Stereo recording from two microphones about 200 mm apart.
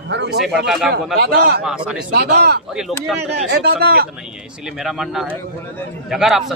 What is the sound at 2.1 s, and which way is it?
Speech, 55° right (ahead or behind).